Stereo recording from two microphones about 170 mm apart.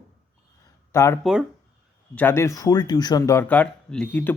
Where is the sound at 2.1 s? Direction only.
15° left (ahead or behind).